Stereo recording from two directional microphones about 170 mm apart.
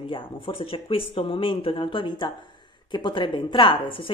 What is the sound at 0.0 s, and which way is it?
A woman's voice, 30° left (ahead or behind).